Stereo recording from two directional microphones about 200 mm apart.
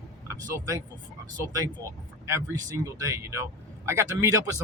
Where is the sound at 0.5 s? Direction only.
15° right (ahead or behind).